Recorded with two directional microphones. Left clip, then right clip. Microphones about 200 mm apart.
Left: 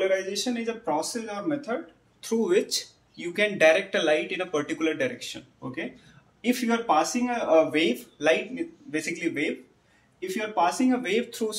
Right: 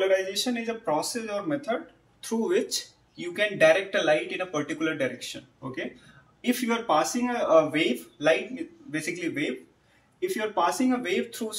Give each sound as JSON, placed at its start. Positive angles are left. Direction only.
{"t": 0.1, "sound": "speech", "side_deg": 15}
{"t": 6.4, "sound": "speech", "side_deg": 20}